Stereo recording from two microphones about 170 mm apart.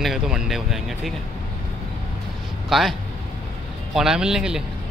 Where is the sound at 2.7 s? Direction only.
Centre (ahead or behind).